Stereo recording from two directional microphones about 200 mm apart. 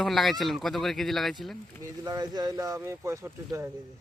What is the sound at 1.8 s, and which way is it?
Speech, 20° right (ahead or behind).